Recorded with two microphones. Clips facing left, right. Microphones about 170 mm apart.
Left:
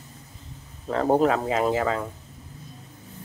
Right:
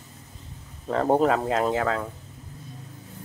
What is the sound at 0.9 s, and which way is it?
Speech, centre (ahead or behind).